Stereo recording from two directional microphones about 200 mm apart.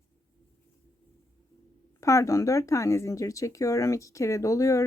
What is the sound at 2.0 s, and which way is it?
Speech, 15° left (ahead or behind).